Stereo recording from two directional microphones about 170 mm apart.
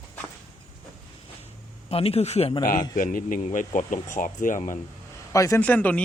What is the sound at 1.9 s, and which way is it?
Speech, 35° left (ahead or behind).